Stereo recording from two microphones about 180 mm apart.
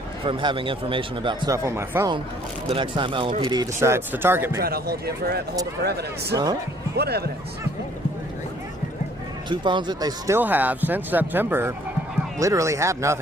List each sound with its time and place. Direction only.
0.3 s speech: 30° right (ahead or behind)
2.6 s speech: 30° right (ahead or behind); by 4.6 s 10° right (ahead or behind)
4.6 s speech: 60° right (ahead or behind)
6.3 s speech: 20° right (ahead or behind)
6.9 s speech: 65° right (ahead or behind)
9.5 s speech: 25° right (ahead or behind)